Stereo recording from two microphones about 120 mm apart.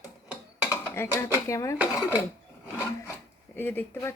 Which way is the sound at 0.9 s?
20° left (ahead or behind).